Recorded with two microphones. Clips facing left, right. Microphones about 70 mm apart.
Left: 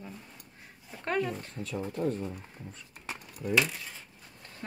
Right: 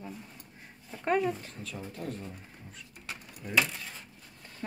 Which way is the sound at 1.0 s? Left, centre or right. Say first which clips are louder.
Right 3 dB; centre.